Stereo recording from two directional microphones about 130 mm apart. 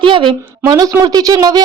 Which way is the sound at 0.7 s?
30° right (ahead or behind).